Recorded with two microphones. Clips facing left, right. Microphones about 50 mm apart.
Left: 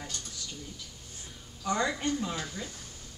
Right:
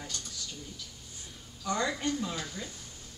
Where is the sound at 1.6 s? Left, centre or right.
Centre.